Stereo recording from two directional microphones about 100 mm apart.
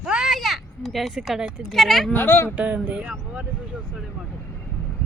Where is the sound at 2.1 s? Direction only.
20° left (ahead or behind).